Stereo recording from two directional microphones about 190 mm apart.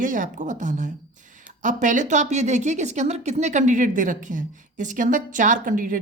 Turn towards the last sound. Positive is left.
turn(degrees=-45)  # may be behind; listen again after turning